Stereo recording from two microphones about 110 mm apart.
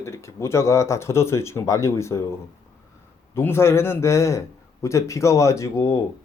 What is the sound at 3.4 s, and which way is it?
Speech, 20° left (ahead or behind).